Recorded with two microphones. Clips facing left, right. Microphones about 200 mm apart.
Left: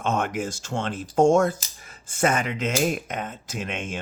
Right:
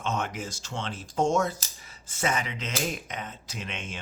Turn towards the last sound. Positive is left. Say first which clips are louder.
# left 7 dB
turn(degrees=50)  # may be behind; listen again after turning